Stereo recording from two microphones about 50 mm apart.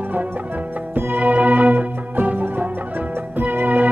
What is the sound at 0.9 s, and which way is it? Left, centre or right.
Music, right.